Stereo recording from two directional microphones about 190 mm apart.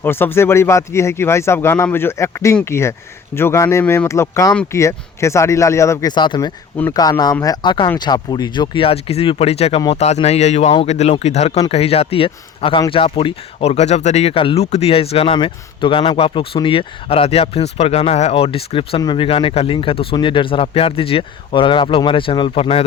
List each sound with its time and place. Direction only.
0.0 s speech: 10° left (ahead or behind); by 22.9 s 30° left (ahead or behind)